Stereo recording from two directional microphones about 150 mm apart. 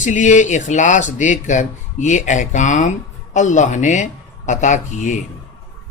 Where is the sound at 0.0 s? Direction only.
55° left (ahead or behind).